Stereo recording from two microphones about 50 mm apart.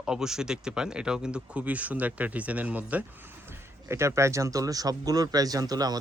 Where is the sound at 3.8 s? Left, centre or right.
Right.